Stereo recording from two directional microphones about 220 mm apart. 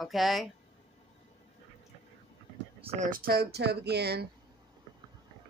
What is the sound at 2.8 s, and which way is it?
Speech, 35° right (ahead or behind).